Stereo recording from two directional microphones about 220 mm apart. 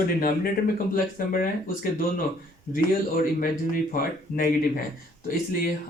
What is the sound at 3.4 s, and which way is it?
Speech, 40° left (ahead or behind).